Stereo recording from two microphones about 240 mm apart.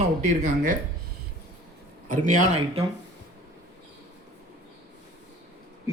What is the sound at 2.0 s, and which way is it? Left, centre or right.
Speech, right.